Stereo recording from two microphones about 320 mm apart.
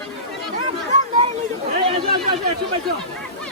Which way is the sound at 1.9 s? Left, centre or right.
Centre.